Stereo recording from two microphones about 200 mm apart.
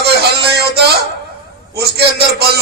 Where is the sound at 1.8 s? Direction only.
55° right (ahead or behind).